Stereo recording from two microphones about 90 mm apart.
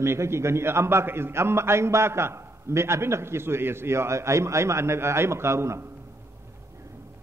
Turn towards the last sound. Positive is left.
turn(degrees=-30)  # may be behind; listen again after turning